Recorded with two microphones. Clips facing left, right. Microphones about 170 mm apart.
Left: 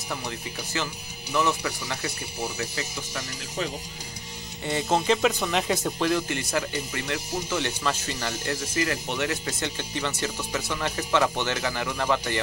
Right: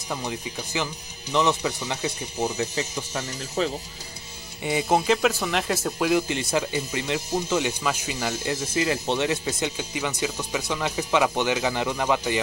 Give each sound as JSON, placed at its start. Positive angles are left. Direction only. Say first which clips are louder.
{"t": 0.1, "sound": "speech", "louder": "right 3 dB", "side_deg": -15}
{"t": 4.6, "sound": "speech", "louder": "right 3 dB", "side_deg": -15}
{"t": 5.0, "sound": "speech", "louder": "right 1 dB", "side_deg": 0}
{"t": 8.7, "sound": "speech", "louder": "right 4 dB", "side_deg": -25}